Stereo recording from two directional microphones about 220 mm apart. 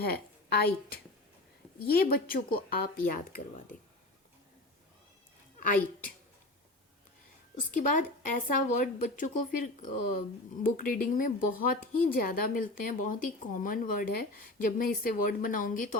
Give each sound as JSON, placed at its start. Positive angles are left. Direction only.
{"t": 0.0, "sound": "a woman's voice", "side_deg": 45}
{"t": 5.5, "sound": "a woman's voice", "side_deg": 40}
{"t": 7.5, "sound": "speech", "side_deg": 35}